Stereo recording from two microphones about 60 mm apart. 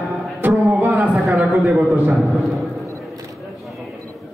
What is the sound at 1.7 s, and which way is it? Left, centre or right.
Speech, right.